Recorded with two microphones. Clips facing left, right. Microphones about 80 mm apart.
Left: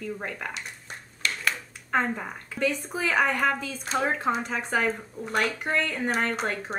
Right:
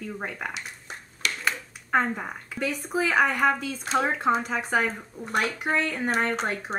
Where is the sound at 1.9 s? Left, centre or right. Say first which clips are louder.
Right 2 dB; centre.